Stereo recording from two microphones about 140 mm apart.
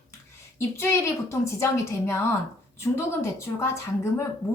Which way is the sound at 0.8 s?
20° left (ahead or behind).